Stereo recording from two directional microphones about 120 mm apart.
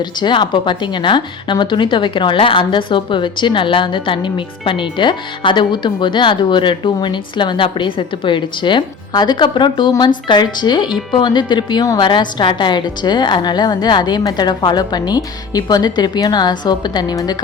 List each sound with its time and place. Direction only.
0.0 s a woman's voice: 40° left (ahead or behind)